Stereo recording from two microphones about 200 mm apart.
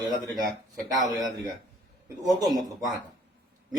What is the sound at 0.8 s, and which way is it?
A man's voice, 15° right (ahead or behind).